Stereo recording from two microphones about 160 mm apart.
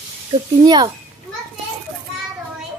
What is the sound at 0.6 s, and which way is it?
Speech, 25° right (ahead or behind).